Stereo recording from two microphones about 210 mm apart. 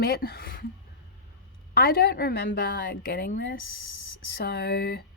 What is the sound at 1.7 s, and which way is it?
A woman's voice, 45° left (ahead or behind).